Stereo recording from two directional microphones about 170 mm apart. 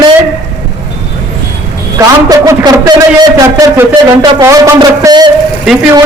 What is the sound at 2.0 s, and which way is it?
Speech, 20° right (ahead or behind).